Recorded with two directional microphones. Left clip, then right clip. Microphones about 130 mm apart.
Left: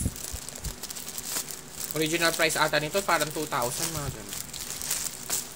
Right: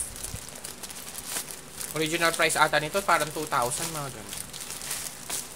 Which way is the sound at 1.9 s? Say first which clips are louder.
Even; 20° right (ahead or behind).